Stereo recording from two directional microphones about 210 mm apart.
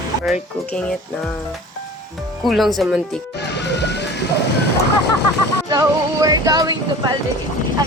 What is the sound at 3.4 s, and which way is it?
Music, 55° left (ahead or behind).